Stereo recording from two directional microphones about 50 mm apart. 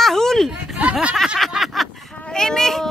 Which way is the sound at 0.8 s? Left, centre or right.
Right.